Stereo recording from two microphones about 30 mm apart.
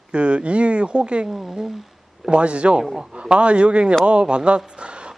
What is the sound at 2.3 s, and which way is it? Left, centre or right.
A man's voice, right.